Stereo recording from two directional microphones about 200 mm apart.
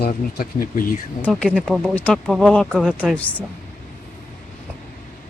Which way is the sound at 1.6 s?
5° left (ahead or behind).